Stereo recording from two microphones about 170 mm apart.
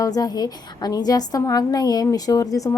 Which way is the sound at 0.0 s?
20° left (ahead or behind).